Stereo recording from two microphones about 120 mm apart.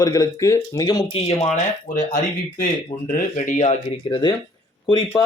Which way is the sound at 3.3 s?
90° left.